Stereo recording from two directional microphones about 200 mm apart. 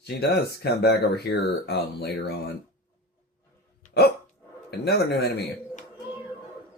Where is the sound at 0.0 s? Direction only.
55° left (ahead or behind).